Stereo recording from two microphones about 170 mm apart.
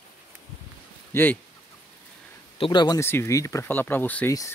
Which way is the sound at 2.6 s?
25° left (ahead or behind).